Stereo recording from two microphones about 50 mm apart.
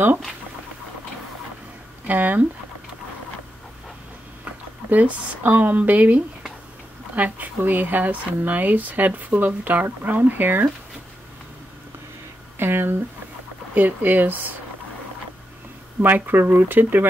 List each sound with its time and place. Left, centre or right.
2.0 s speech: right
4.9 s speech: right
12.5 s speech: right
16.0 s speech: right